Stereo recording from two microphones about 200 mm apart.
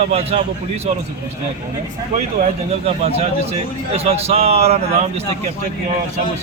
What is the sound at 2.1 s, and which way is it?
Speech, 30° right (ahead or behind).